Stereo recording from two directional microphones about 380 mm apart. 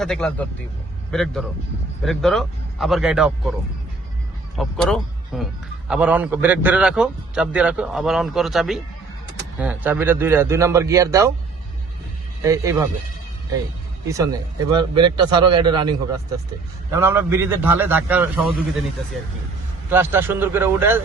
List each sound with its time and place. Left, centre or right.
0.0 s a man's voice: centre
4.5 s a man's voice: centre
12.4 s a man's voice: centre
14.1 s a man's voice: centre
19.9 s a man's voice: centre